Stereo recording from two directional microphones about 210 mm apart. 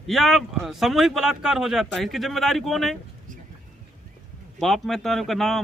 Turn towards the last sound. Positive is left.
turn(degrees=0)  # may be behind; listen again after turning